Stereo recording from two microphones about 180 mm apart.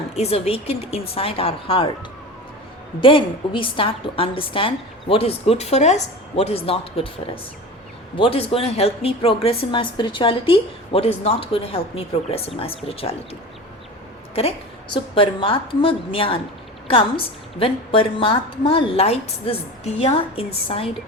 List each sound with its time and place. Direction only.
0.1 s a woman's voice: 35° left (ahead or behind)
3.0 s a woman's voice: 30° left (ahead or behind)
8.1 s a woman's voice: 30° left (ahead or behind)
15.1 s a woman's voice: 30° left (ahead or behind)